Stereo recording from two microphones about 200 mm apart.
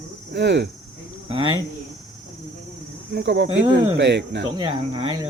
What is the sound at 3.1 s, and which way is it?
Speech, 55° right (ahead or behind).